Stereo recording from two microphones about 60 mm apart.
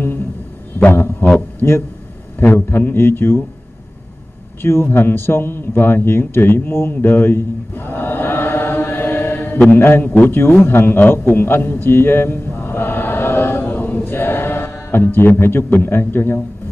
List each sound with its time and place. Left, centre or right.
0.9 s a man's voice: left
4.6 s a man's voice: left